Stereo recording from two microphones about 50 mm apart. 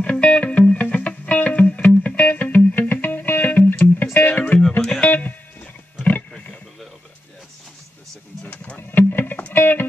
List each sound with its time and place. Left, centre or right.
0.0 s music: left
8.7 s a sound: left
9.5 s music: left